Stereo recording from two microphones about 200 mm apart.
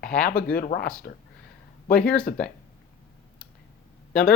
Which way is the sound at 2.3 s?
45° left (ahead or behind).